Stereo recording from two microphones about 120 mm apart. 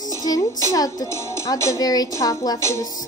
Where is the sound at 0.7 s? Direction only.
30° left (ahead or behind).